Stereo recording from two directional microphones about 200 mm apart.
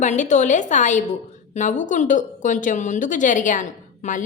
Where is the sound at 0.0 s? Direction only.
35° left (ahead or behind).